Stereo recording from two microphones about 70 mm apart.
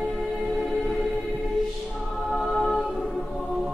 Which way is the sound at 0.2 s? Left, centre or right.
Centre.